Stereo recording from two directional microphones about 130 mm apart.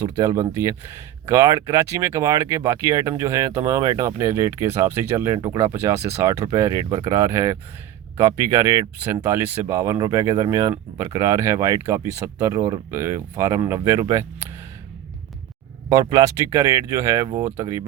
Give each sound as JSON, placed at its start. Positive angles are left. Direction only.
{"t": 0.0, "sound": "speech", "side_deg": -25}
{"t": 15.9, "sound": "speech", "side_deg": -30}
{"t": 17.4, "sound": "speech", "side_deg": -20}